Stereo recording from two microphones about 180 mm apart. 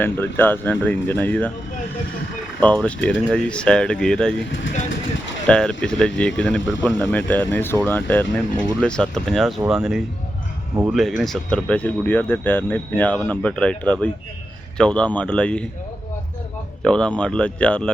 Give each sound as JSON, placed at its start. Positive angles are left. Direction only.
{"t": 0.0, "sound": "speech", "side_deg": 10}
{"t": 2.6, "sound": "speech", "side_deg": 5}
{"t": 4.4, "sound": "speech", "side_deg": 90}
{"t": 5.5, "sound": "speech", "side_deg": 5}
{"t": 16.8, "sound": "speech", "side_deg": 5}